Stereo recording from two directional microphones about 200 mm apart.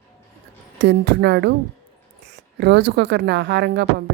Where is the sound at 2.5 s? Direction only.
60° right (ahead or behind).